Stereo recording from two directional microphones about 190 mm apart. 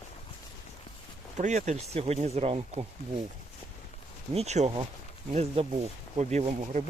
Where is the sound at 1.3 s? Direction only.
40° right (ahead or behind).